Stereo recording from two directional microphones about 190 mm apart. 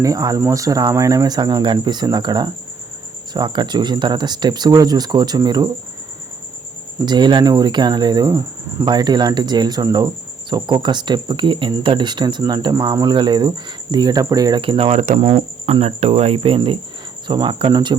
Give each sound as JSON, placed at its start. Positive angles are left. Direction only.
{"t": 0.0, "sound": "speech", "side_deg": -20}
{"t": 7.0, "sound": "speech", "side_deg": -20}
{"t": 15.2, "sound": "cricket", "side_deg": -30}
{"t": 17.2, "sound": "speech", "side_deg": -25}